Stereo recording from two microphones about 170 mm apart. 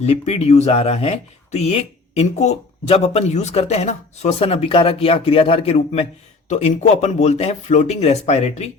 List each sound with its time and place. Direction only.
0.0 s speech: 40° left (ahead or behind)